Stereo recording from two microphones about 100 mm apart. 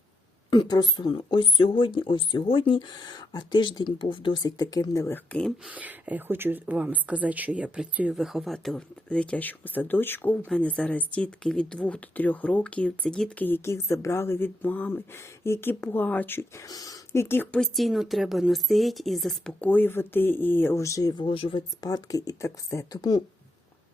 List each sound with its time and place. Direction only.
0.5 s speech: 45° left (ahead or behind)
2.9 s speech: 45° left (ahead or behind)
4.4 s speech: 40° left (ahead or behind)
5.0 s speech: 20° left (ahead or behind)
5.6 s speech: 15° right (ahead or behind); by 13.4 s 5° left (ahead or behind)
13.4 s speech: 25° left (ahead or behind)
16.6 s speech: 40° left (ahead or behind)
17.1 s speech: 25° left (ahead or behind)
17.6 s speech: centre (ahead or behind)
19.6 s speech: 20° left (ahead or behind); by 21.2 s 40° left (ahead or behind)
21.2 s speech: 60° left (ahead or behind)
21.8 s speech: 40° left (ahead or behind)
23.0 s speech: 45° left (ahead or behind)